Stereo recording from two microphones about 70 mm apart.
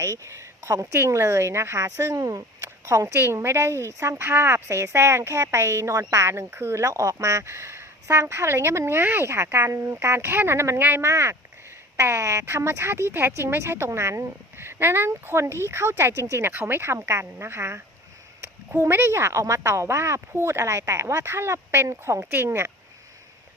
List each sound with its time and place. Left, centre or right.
0.0 s speech: right
3.2 s speech: right
11.0 s speech: right
18.8 s speech: right
22.2 s speech: right